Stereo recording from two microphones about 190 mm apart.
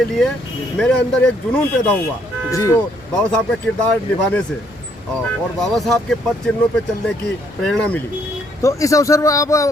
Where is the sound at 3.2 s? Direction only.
5° left (ahead or behind).